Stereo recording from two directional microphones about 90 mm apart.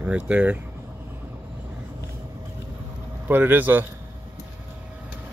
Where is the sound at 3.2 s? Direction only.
20° right (ahead or behind).